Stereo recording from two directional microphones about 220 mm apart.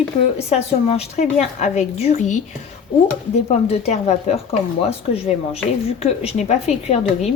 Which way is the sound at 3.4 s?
30° left (ahead or behind).